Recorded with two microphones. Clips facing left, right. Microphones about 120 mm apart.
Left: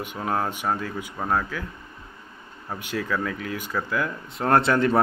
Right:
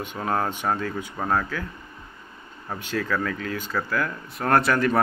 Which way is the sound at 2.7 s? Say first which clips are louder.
Right 1 dB; 15° left (ahead or behind).